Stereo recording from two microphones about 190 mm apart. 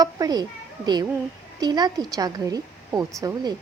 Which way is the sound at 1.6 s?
20° right (ahead or behind).